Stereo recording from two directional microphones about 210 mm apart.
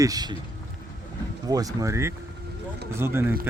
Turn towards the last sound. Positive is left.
turn(degrees=-10)  # may be behind; listen again after turning